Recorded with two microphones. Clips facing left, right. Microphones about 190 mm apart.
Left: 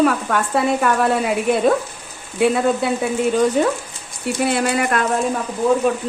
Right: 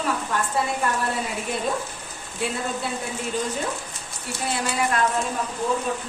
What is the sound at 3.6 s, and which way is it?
A woman's voice, 65° left (ahead or behind).